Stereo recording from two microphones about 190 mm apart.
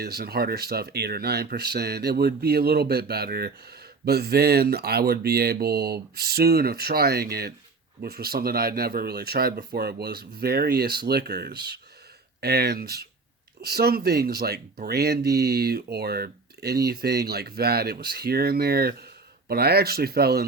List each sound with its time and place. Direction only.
0.0 s speech: 55° right (ahead or behind)